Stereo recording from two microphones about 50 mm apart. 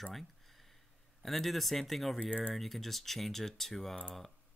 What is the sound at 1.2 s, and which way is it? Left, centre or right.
Speech, centre.